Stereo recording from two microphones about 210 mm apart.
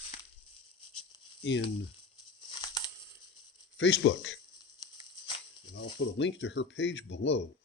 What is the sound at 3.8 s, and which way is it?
Speech, 60° left (ahead or behind).